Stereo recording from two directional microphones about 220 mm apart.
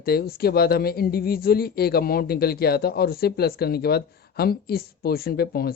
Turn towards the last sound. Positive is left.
turn(degrees=45)  # may be behind; listen again after turning